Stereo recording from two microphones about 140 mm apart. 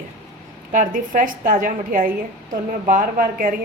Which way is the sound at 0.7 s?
70° right (ahead or behind).